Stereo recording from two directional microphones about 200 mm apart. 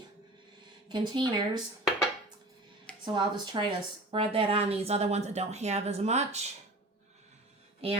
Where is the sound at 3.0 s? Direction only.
25° right (ahead or behind).